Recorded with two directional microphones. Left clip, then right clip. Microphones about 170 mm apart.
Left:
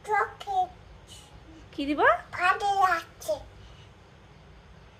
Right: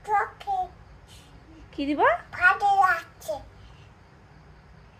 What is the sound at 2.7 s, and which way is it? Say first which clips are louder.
Child singing: right 3 dB; 20° left (ahead or behind).